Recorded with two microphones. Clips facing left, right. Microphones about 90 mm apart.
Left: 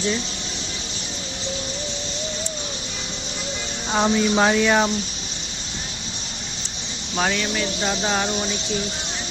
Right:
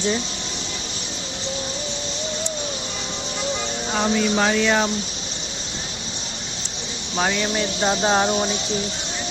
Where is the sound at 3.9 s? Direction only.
20° left (ahead or behind).